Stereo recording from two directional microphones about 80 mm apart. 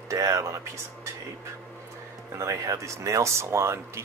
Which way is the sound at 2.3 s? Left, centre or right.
Right.